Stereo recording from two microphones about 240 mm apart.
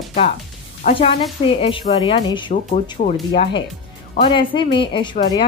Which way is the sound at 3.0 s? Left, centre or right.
Left.